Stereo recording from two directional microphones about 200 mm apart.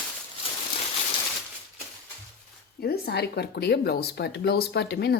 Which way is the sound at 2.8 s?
55° left (ahead or behind).